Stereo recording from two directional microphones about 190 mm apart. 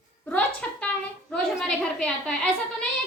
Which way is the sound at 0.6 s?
5° left (ahead or behind).